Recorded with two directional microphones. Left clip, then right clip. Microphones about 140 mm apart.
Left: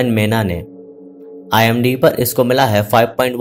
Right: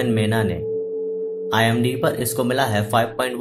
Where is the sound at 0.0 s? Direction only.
40° left (ahead or behind).